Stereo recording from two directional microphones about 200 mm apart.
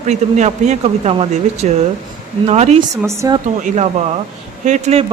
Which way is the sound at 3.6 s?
35° right (ahead or behind).